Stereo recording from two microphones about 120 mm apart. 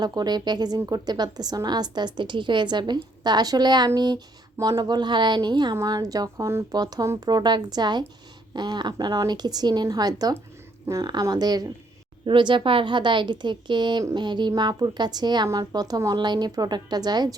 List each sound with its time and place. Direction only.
0.0 s a woman's voice: 35° right (ahead or behind)